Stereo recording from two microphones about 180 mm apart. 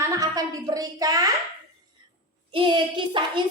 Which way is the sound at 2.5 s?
25° right (ahead or behind).